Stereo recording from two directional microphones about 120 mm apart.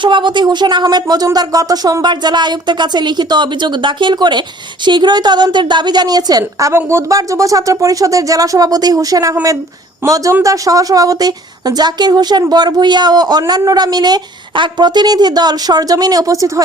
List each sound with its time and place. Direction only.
0.0 s a woman's voice: 40° right (ahead or behind); by 10.2 s 20° right (ahead or behind)
10.4 s a woman's voice: 30° right (ahead or behind)